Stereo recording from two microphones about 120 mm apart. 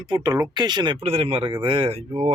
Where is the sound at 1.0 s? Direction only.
50° right (ahead or behind).